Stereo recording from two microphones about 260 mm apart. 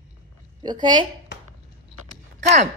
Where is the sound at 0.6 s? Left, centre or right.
Centre.